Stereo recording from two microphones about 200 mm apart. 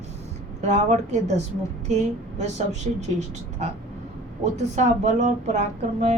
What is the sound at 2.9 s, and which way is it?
Speech, 35° right (ahead or behind).